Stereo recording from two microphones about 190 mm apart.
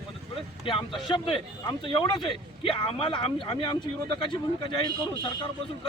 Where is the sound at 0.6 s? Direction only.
25° left (ahead or behind).